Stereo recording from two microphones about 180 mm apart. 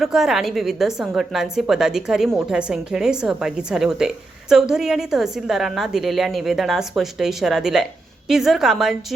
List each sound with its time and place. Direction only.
0.0 s a woman's voice: centre (ahead or behind)